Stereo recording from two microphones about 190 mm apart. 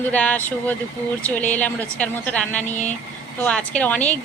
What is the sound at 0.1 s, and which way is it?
Speech, 10° left (ahead or behind).